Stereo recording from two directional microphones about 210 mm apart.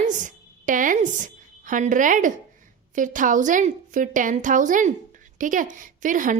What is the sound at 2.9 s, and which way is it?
A woman's voice, 40° right (ahead or behind).